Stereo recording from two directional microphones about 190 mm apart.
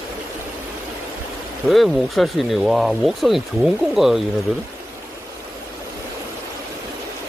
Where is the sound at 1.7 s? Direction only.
Centre (ahead or behind).